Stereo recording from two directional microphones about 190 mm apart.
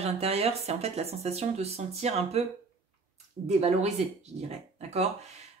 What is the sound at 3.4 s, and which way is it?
Speech, 35° right (ahead or behind).